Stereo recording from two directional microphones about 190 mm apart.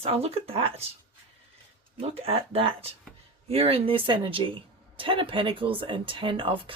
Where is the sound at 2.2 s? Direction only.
30° right (ahead or behind).